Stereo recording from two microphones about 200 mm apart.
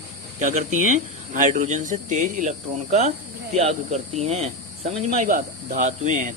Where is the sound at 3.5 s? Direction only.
35° right (ahead or behind).